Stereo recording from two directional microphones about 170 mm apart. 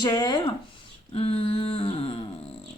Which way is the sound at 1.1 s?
35° left (ahead or behind).